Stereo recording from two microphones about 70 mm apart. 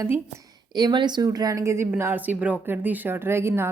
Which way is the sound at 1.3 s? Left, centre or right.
Right.